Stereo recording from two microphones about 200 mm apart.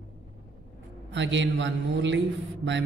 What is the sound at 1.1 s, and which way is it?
A man's voice, 65° right (ahead or behind).